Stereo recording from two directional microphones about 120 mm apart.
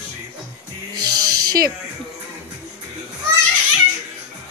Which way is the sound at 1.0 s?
35° right (ahead or behind).